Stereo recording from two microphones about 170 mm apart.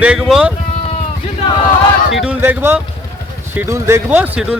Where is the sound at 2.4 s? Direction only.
15° right (ahead or behind).